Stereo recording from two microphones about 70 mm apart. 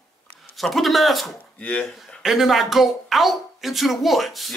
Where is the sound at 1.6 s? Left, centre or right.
Left.